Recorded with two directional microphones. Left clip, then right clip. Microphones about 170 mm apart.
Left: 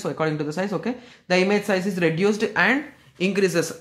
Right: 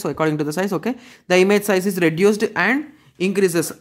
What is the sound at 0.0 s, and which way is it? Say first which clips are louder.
Speech: right 4 dB; 35° right (ahead or behind).